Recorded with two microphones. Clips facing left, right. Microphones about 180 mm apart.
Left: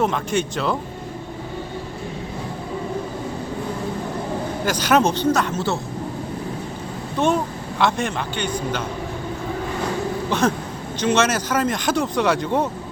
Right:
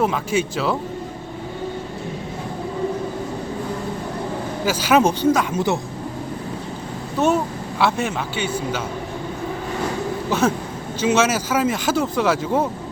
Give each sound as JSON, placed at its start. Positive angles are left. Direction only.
{"t": 0.0, "sound": "speech", "side_deg": -5}
{"t": 4.6, "sound": "speech", "side_deg": -5}
{"t": 7.2, "sound": "speech", "side_deg": -5}
{"t": 10.2, "sound": "a sound", "side_deg": -5}
{"t": 11.0, "sound": "speech", "side_deg": -5}